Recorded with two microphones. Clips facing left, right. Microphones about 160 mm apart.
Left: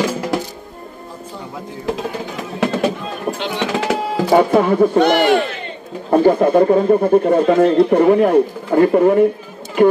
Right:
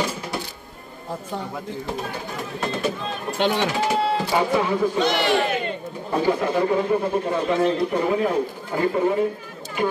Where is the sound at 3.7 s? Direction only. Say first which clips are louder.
Left 3 dB; 90° left.